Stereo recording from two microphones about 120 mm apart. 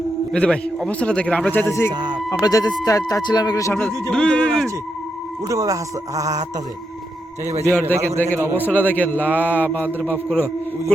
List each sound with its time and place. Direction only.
0.3 s a man's voice: 10° left (ahead or behind)
1.9 s speech: 40° right (ahead or behind)
2.4 s speech: 30° left (ahead or behind)
4.1 s a man's voice: 5° left (ahead or behind)
5.5 s speech: 30° right (ahead or behind)
7.7 s a man's voice: 15° left (ahead or behind)
7.9 s speech: 25° right (ahead or behind)
8.5 s a man's voice: 15° left (ahead or behind)